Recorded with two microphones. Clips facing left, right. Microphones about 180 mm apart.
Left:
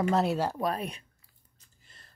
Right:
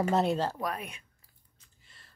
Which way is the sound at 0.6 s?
35° left (ahead or behind).